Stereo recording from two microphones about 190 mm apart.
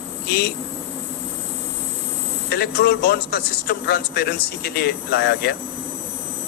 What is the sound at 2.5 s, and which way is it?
A man's voice, 55° left (ahead or behind).